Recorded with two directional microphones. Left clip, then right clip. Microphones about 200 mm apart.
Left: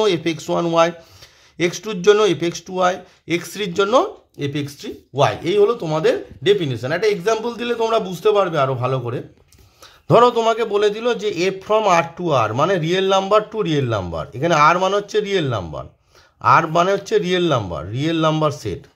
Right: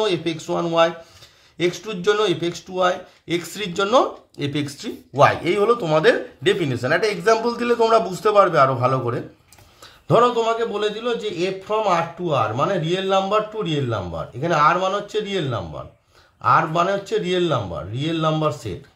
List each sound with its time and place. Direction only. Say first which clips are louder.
0.0 s a man's voice: left 3 dB; 30° left (ahead or behind)
10.0 s a man's voice: left 3 dB; 30° left (ahead or behind)